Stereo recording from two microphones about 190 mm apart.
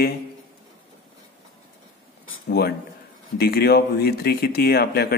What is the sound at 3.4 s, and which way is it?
Speech, 55° left (ahead or behind).